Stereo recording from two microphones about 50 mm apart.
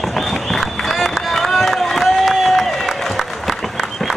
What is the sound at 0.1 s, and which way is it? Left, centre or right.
Run, centre.